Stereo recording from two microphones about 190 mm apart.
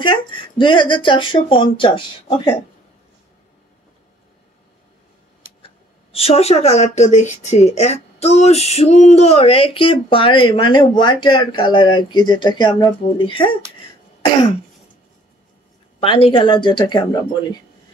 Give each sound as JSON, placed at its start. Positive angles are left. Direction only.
{"t": 0.0, "sound": "speech", "side_deg": 25}
{"t": 6.1, "sound": "a woman's voice", "side_deg": 30}
{"t": 16.0, "sound": "speech", "side_deg": 30}